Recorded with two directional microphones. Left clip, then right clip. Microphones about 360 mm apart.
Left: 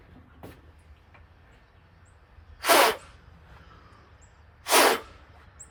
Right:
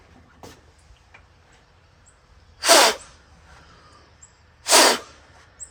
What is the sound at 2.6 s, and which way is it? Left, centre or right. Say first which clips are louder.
Snort: right 5 dB; right.